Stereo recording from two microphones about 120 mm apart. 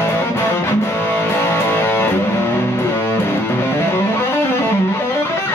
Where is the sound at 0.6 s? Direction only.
20° left (ahead or behind).